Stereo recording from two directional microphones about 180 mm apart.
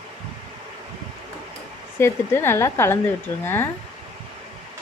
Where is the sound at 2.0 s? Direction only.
15° left (ahead or behind).